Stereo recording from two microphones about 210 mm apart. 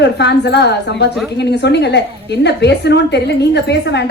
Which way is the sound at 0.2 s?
55° left (ahead or behind).